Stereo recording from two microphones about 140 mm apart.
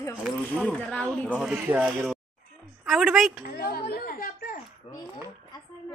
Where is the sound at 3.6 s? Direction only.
90° left.